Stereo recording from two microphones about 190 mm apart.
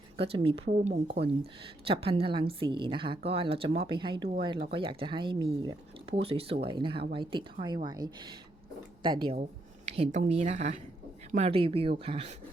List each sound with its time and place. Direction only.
0.2 s a woman's voice: 30° right (ahead or behind)